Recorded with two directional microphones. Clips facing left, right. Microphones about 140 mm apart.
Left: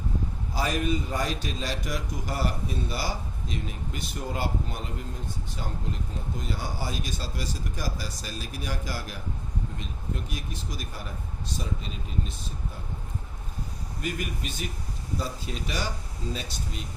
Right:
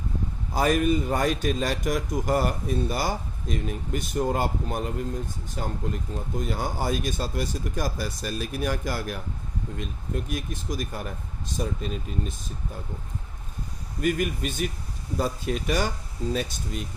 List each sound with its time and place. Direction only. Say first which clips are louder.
0.5 s a man's voice: right 6 dB; 50° right (ahead or behind)
14.0 s a man's voice: right 8 dB; 50° right (ahead or behind)